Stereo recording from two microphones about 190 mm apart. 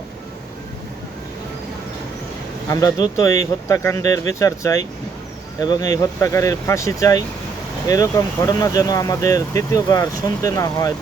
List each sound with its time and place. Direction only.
2.6 s speech: 15° left (ahead or behind)